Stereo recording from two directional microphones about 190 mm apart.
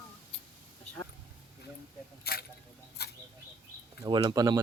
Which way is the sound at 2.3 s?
55° left (ahead or behind).